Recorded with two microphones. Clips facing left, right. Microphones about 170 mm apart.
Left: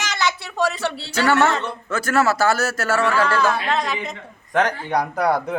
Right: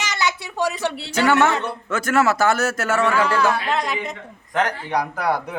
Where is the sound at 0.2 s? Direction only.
15° right (ahead or behind).